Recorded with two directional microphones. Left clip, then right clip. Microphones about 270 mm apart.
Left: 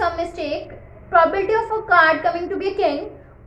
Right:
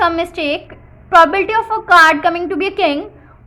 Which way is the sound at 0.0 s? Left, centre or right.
Right.